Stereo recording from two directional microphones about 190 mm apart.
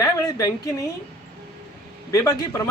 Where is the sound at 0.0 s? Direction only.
20° left (ahead or behind).